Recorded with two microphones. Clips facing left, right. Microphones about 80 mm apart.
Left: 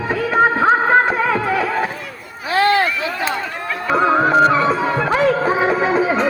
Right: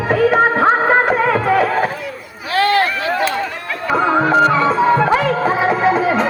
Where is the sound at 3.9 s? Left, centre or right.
Centre.